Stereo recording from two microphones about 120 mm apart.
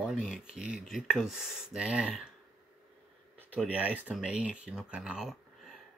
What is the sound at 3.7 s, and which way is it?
Speech, 10° right (ahead or behind).